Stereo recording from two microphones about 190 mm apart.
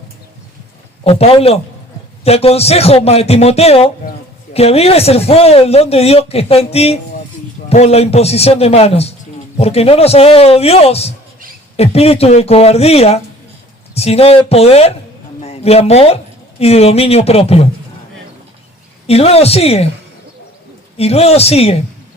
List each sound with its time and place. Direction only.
1.0 s speech: 30° left (ahead or behind)
19.0 s speech: 30° left (ahead or behind)
21.0 s speech: 35° left (ahead or behind)